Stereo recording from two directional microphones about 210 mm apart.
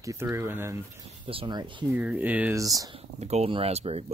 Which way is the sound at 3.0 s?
30° right (ahead or behind).